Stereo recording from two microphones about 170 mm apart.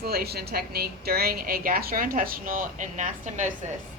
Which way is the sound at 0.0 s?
65° right (ahead or behind).